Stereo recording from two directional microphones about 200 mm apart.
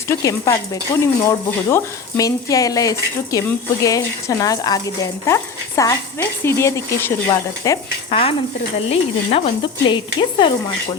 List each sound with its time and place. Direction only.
0.1 s speech: 15° left (ahead or behind)
8.9 s stir: 30° left (ahead or behind)